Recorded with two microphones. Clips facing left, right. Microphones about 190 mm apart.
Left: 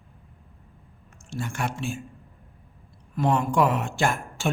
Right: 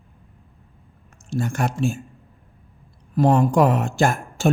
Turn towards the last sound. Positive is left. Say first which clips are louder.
# right 6 dB
turn(degrees=-40)  # may be behind; listen again after turning